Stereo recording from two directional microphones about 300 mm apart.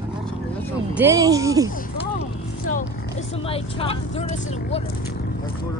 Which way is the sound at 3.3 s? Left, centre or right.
Centre.